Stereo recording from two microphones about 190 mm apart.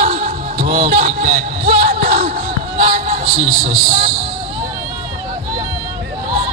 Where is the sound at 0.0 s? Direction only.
45° right (ahead or behind).